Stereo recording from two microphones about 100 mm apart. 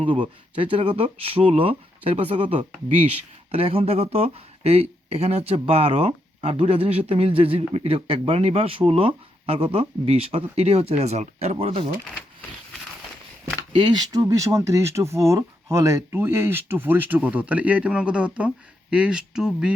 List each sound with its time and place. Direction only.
0.0 s speech: 55° right (ahead or behind); by 11.9 s 75° right (ahead or behind)
13.7 s speech: 50° right (ahead or behind); by 19.5 s 10° right (ahead or behind)